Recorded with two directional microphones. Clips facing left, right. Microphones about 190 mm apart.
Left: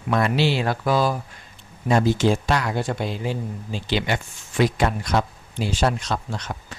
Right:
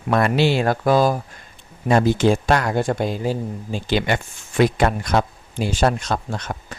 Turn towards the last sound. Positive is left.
turn(degrees=-50)  # may be behind; listen again after turning